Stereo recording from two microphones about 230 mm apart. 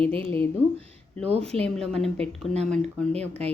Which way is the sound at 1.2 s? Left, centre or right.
Right.